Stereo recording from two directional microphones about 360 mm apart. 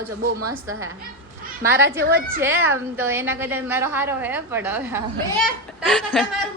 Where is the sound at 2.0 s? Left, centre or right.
Right.